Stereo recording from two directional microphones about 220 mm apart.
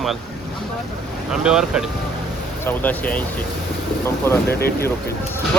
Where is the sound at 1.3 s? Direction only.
5° right (ahead or behind).